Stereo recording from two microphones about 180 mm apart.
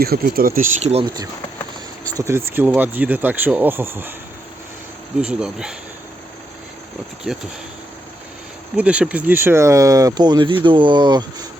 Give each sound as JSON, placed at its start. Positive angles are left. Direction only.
{"t": 0.0, "sound": "speech", "side_deg": -55}
{"t": 0.8, "sound": "speech", "side_deg": -35}
{"t": 1.0, "sound": "speech", "side_deg": -20}
{"t": 5.2, "sound": "speech", "side_deg": -5}
{"t": 8.7, "sound": "speech", "side_deg": -5}